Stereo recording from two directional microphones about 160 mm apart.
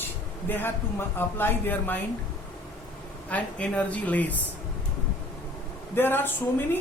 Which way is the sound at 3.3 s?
10° left (ahead or behind).